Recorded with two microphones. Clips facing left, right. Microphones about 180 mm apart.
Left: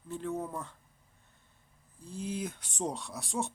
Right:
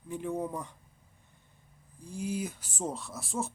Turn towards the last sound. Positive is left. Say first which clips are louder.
# even
turn(degrees=0)  # may be behind; listen again after turning